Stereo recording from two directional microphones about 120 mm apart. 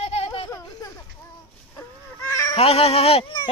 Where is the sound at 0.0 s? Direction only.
60° left (ahead or behind).